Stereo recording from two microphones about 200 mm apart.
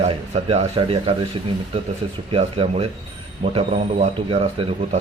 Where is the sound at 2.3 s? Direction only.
30° right (ahead or behind).